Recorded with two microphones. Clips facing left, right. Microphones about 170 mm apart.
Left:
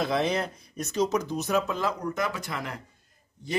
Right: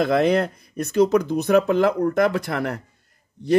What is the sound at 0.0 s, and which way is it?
Speech, 60° right (ahead or behind).